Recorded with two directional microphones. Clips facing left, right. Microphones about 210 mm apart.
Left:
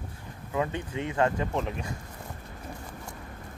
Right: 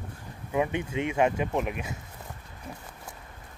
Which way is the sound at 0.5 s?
20° right (ahead or behind).